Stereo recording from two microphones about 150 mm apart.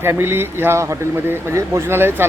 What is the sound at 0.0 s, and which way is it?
Speech, 15° right (ahead or behind).